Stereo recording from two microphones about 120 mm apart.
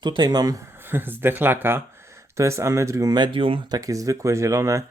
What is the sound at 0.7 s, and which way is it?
Speech, 20° right (ahead or behind).